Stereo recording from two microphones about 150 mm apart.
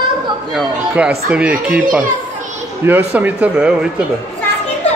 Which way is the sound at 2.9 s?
10° right (ahead or behind).